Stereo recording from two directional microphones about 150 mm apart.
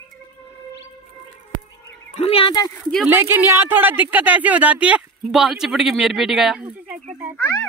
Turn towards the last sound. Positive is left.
turn(degrees=10)  # may be behind; listen again after turning